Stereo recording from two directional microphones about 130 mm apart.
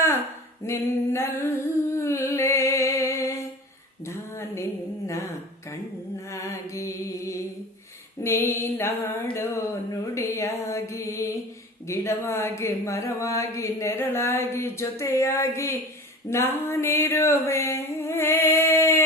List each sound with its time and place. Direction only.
0.6 s speech: 20° left (ahead or behind)
2.0 s music: 20° left (ahead or behind)
4.0 s a sound: 20° left (ahead or behind)
5.0 s speech: 20° left (ahead or behind)
10.2 s a sound: 20° left (ahead or behind)
11.9 s speech: 20° left (ahead or behind)